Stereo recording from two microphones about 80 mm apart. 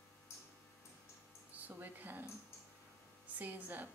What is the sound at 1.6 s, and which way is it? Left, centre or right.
Speech, right.